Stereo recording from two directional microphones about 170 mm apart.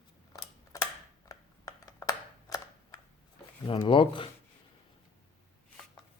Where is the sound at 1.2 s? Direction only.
20° left (ahead or behind).